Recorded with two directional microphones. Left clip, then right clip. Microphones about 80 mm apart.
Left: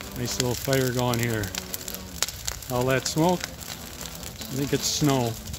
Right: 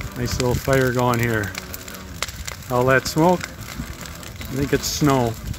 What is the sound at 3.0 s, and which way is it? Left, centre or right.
Speech, centre.